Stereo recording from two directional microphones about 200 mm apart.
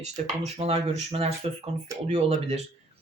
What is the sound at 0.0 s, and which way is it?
Speech, 35° right (ahead or behind).